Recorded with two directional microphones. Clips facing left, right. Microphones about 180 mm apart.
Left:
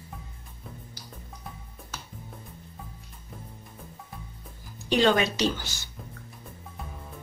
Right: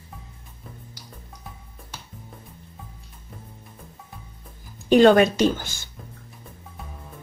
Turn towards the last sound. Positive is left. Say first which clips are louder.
# right 6 dB
turn(degrees=-50)  # may be behind; listen again after turning